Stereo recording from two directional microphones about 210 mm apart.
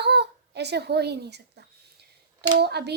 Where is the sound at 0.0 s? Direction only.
50° right (ahead or behind).